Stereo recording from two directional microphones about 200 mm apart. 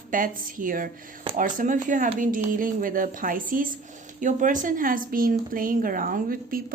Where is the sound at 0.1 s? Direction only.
40° right (ahead or behind).